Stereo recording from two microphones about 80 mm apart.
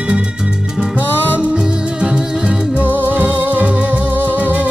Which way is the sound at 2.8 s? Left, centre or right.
Right.